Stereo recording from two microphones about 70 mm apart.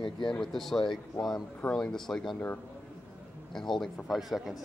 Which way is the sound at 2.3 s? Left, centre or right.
Left.